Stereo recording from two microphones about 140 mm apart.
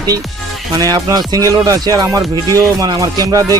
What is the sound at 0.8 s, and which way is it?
Music, 25° right (ahead or behind).